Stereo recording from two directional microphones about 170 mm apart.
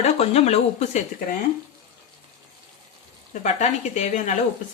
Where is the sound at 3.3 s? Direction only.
45° left (ahead or behind).